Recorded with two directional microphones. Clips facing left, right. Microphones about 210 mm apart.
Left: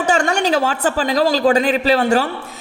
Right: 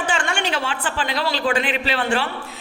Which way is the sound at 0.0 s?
40° left (ahead or behind).